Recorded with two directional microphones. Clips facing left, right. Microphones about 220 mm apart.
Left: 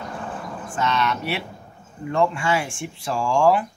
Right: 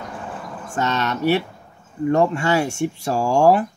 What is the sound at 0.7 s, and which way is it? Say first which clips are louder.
Speech: right 1 dB; 40° right (ahead or behind).